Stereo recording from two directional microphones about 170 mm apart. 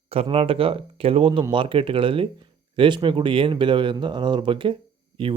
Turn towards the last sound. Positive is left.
turn(degrees=-30)  # may be behind; listen again after turning